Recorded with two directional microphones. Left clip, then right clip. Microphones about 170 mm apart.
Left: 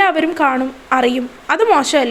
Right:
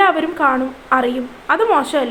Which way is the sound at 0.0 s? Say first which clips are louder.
Even; 40° left (ahead or behind).